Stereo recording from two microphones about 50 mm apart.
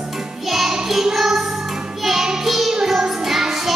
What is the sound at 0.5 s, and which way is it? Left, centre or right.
Music, centre.